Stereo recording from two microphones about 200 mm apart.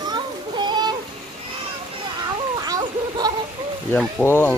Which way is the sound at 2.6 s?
20° right (ahead or behind).